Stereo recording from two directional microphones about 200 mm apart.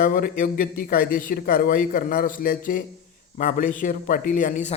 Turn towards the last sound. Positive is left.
turn(degrees=35)  # may be behind; listen again after turning